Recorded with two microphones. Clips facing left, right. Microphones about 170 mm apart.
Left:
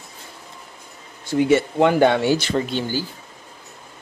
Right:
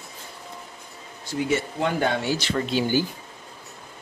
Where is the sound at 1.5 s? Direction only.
75° left (ahead or behind).